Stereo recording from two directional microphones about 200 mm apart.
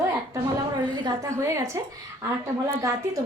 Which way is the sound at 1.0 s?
15° right (ahead or behind).